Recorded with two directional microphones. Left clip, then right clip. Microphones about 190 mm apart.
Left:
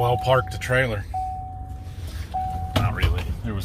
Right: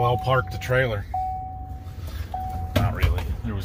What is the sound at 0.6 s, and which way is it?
Speech, 15° right (ahead or behind).